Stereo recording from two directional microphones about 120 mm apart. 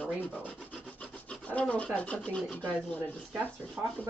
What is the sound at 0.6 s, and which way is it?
Rub, 10° left (ahead or behind).